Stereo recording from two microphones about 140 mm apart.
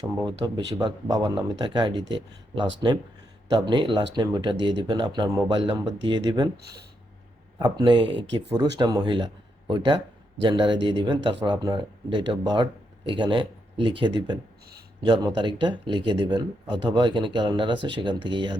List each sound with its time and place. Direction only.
0.3 s speech: 30° right (ahead or behind)
7.6 s speech: 30° right (ahead or behind)